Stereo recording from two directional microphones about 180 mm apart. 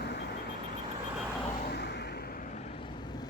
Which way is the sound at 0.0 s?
65° left (ahead or behind).